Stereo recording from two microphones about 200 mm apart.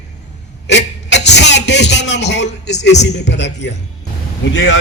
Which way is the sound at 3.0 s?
60° left (ahead or behind).